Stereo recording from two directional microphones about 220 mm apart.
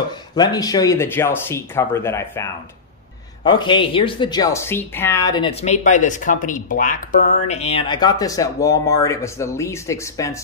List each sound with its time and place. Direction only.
0.4 s speech: 15° left (ahead or behind)